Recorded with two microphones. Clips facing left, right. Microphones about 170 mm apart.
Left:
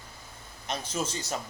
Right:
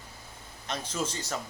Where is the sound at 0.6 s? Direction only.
15° left (ahead or behind).